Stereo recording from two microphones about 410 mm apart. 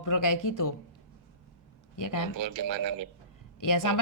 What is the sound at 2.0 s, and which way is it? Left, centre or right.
Speech, left.